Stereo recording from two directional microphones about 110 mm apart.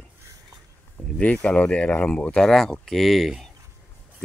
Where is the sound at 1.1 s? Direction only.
10° left (ahead or behind).